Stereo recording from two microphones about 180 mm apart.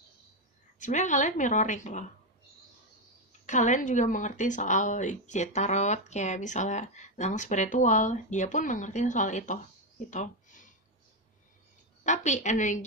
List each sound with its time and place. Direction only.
0.7 s speech: 45° left (ahead or behind)
3.4 s speech: 45° left (ahead or behind)
10.0 s a sound: 45° left (ahead or behind)
12.0 s a woman's voice: 40° left (ahead or behind)